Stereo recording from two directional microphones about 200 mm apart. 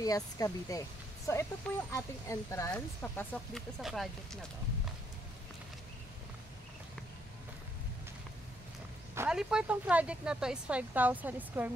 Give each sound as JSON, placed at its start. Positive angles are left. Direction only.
{"t": 0.0, "sound": "speech", "side_deg": 15}
{"t": 9.1, "sound": "speech", "side_deg": -5}